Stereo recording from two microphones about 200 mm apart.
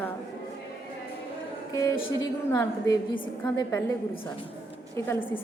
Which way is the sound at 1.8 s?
15° left (ahead or behind).